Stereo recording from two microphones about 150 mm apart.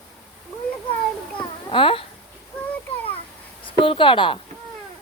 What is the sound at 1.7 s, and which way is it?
Speech, 35° left (ahead or behind).